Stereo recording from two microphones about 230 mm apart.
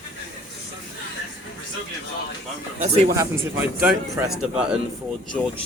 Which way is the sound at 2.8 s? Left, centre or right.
Right.